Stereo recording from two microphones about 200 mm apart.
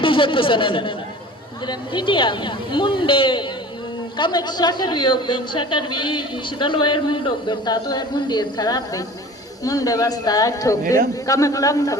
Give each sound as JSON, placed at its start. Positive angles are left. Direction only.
{"t": 0.0, "sound": "speech", "side_deg": 25}